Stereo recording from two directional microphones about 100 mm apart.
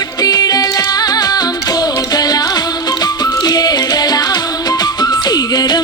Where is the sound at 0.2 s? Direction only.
40° left (ahead or behind).